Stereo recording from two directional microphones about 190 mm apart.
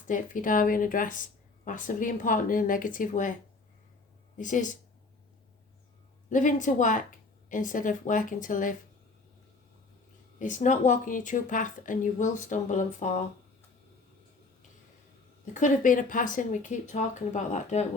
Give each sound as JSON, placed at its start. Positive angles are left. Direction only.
{"t": 0.1, "sound": "a woman's voice", "side_deg": 45}
{"t": 4.4, "sound": "a woman's voice", "side_deg": 45}
{"t": 6.3, "sound": "a woman's voice", "side_deg": 40}
{"t": 10.4, "sound": "speech", "side_deg": 40}
{"t": 15.5, "sound": "speech", "side_deg": 40}